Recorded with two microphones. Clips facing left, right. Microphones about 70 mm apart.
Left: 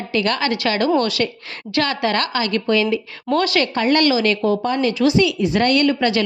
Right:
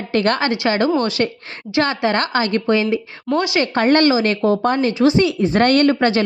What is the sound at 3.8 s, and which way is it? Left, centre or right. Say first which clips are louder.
Speech: right 4 dB; right.